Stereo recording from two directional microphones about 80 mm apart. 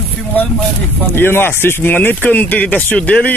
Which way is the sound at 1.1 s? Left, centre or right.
Left.